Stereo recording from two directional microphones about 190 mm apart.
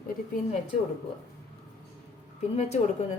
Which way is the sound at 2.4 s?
35° left (ahead or behind).